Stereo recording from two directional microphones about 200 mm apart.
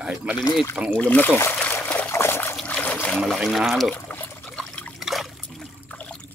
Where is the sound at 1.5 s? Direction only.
10° left (ahead or behind).